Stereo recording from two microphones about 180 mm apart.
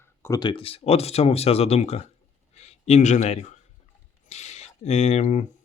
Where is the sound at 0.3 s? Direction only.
25° left (ahead or behind).